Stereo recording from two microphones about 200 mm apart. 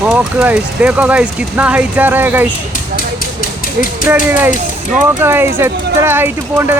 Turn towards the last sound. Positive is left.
turn(degrees=-10)  # may be behind; listen again after turning